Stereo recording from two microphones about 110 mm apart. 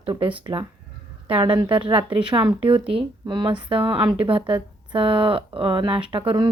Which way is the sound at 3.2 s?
45° right (ahead or behind).